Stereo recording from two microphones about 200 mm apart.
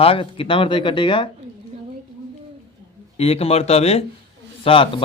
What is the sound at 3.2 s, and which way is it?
A man's voice, 30° left (ahead or behind).